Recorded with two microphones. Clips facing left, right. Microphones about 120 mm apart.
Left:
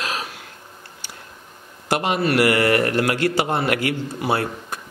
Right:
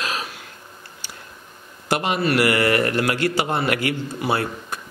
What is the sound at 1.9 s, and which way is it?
A man's voice, 50° left (ahead or behind).